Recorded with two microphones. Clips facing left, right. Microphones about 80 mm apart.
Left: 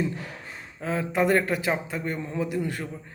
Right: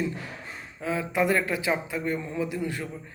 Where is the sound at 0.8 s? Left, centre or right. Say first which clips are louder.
Left 1 dB; left.